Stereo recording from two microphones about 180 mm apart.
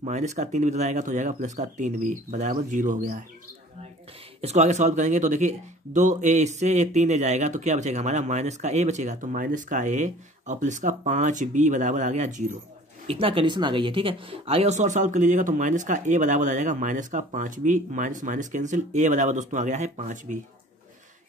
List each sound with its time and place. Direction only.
0.0 s speech: 40° right (ahead or behind)
4.4 s speech: 40° right (ahead or behind)
13.0 s speech: 30° right (ahead or behind)